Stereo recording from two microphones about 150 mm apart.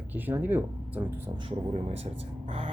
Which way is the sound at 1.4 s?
40° right (ahead or behind).